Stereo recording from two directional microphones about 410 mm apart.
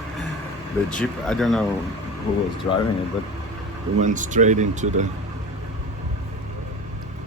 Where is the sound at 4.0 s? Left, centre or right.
Centre.